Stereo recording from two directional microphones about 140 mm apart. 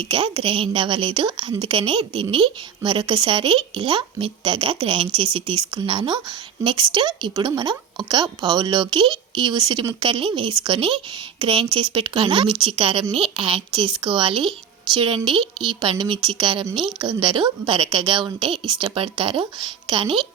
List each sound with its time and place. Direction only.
0.1 s speech: 40° right (ahead or behind)